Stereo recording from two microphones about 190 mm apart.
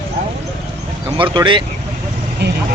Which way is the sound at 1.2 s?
25° right (ahead or behind).